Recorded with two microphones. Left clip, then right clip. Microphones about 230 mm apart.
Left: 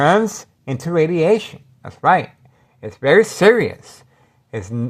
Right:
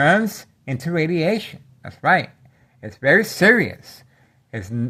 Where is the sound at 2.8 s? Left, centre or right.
Left.